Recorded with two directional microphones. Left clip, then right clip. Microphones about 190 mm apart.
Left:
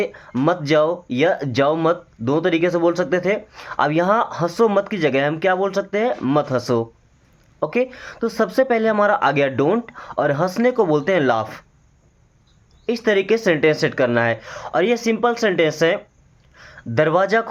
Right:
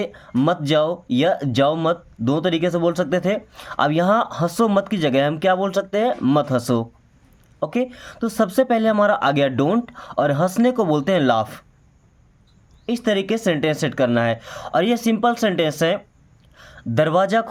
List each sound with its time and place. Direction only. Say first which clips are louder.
0.0 s speech: left 1 dB; 35° right (ahead or behind)
12.8 s speech: left 3 dB; 30° right (ahead or behind)